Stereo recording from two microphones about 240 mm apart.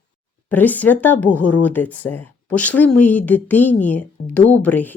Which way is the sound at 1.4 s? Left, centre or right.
Left.